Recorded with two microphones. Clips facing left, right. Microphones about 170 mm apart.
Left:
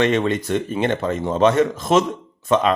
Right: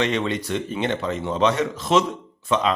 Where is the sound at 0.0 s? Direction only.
50° left (ahead or behind).